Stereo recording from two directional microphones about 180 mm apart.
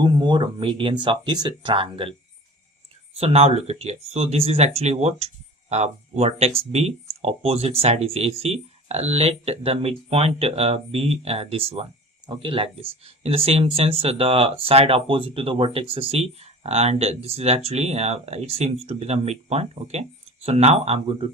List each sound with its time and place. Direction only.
0.0 s speech: 25° right (ahead or behind)
3.2 s speech: 35° right (ahead or behind)